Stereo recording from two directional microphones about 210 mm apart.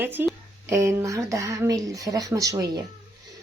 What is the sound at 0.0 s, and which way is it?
Speech, 10° right (ahead or behind).